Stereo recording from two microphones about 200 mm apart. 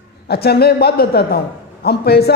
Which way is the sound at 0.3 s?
55° left (ahead or behind).